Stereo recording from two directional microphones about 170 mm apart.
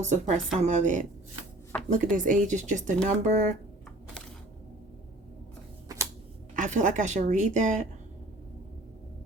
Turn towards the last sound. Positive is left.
turn(degrees=-45)  # may be behind; listen again after turning